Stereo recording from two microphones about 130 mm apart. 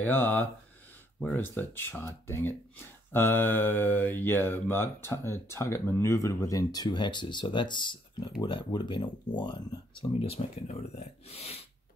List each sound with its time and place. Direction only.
0.0 s speech: 15° left (ahead or behind); by 11.6 s 50° left (ahead or behind)